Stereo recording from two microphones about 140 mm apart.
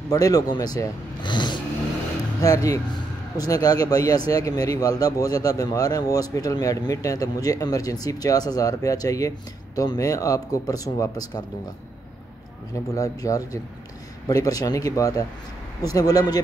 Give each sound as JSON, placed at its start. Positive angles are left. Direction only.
{"t": 0.1, "sound": "a man's voice", "side_deg": 25}
{"t": 12.9, "sound": "a man's voice", "side_deg": 25}